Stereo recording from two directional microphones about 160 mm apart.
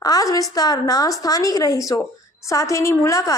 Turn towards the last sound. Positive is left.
turn(degrees=20)  # may be behind; listen again after turning